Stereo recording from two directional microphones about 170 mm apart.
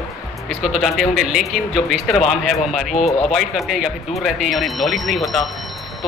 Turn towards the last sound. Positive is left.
turn(degrees=0)  # may be behind; listen again after turning